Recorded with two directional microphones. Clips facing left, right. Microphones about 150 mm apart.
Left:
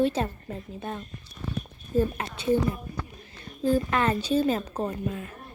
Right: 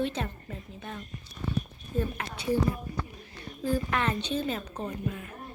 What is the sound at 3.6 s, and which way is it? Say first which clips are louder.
A woman's voice: left 5 dB; 30° left (ahead or behind).